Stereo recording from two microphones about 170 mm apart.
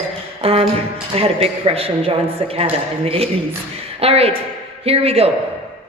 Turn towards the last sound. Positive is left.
turn(degrees=-35)  # may be behind; listen again after turning